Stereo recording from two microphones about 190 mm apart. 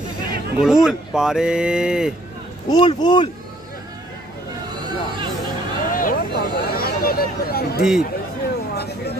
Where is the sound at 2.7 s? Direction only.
25° left (ahead or behind).